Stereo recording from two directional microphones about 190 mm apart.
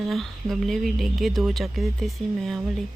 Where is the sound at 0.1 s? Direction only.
Centre (ahead or behind).